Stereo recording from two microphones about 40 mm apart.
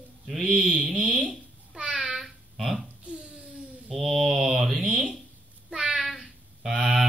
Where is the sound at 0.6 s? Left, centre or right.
Centre.